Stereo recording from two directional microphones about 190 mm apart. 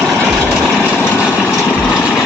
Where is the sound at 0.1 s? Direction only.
5° right (ahead or behind).